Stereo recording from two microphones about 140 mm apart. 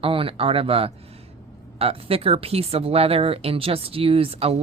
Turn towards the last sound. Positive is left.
turn(degrees=-45)  # may be behind; listen again after turning